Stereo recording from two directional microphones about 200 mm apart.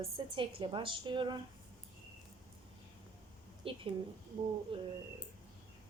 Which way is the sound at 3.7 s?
25° right (ahead or behind).